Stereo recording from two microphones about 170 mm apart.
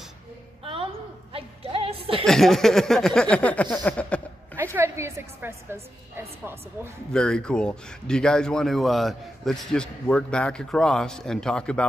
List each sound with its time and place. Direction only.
1.3 s music: 35° right (ahead or behind)
2.2 s speech: centre (ahead or behind)
3.7 s a sound: 5° left (ahead or behind)
4.6 s a woman's voice: 15° right (ahead or behind)
7.1 s speech: 5° left (ahead or behind)